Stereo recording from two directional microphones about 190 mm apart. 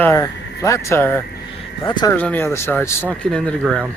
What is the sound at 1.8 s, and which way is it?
Speech, 25° left (ahead or behind).